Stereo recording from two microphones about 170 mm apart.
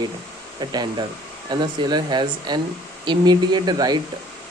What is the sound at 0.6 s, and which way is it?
Speech, 25° right (ahead or behind).